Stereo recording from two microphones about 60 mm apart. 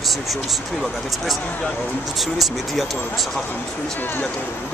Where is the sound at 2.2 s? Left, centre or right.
Centre.